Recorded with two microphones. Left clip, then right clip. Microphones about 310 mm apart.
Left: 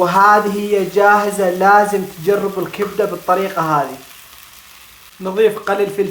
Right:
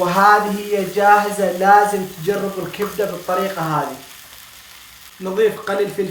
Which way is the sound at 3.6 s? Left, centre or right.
Centre.